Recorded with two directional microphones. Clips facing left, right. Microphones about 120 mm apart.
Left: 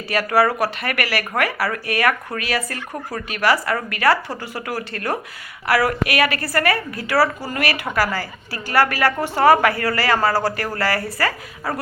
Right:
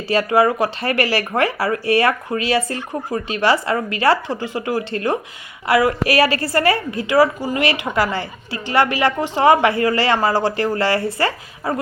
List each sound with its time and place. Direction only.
0.1 s a woman's voice: 25° right (ahead or behind)